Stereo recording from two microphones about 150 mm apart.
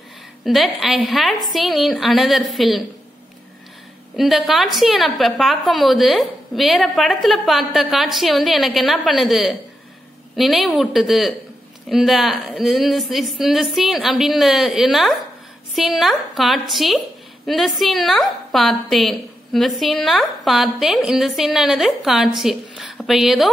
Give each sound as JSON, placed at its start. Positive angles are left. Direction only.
{"t": 0.5, "sound": "a woman's voice", "side_deg": 0}
{"t": 4.2, "sound": "a woman's voice", "side_deg": 0}